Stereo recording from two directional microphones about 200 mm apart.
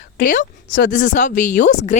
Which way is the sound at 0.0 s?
40° left (ahead or behind).